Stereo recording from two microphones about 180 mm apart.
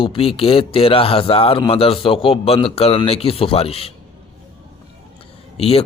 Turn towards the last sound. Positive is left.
turn(degrees=35)  # may be behind; listen again after turning